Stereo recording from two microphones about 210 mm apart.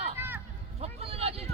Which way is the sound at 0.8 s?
30° right (ahead or behind).